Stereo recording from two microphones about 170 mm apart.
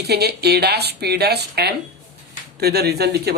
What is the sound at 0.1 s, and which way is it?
Speech, 70° right (ahead or behind).